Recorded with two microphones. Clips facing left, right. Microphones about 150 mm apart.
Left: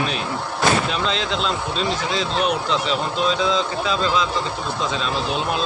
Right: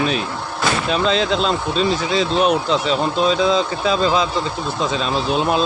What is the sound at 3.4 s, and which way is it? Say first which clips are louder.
Speech: right 4 dB; 40° right (ahead or behind).